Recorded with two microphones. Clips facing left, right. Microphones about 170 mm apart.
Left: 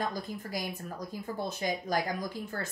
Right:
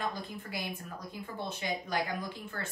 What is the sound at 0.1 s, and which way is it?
A woman's voice, 40° left (ahead or behind).